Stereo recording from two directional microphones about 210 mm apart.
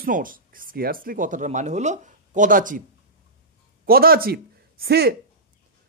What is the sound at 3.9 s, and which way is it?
A man's voice, 45° right (ahead or behind).